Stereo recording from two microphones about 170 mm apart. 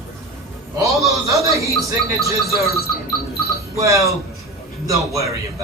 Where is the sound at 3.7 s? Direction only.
20° right (ahead or behind).